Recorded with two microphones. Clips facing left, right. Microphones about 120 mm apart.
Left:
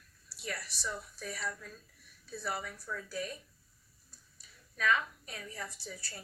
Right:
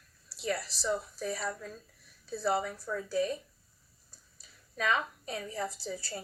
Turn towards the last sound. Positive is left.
turn(degrees=-30)  # may be behind; listen again after turning